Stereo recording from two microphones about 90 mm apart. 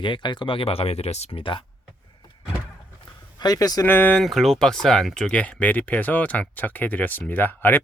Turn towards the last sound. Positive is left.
turn(degrees=20)  # may be behind; listen again after turning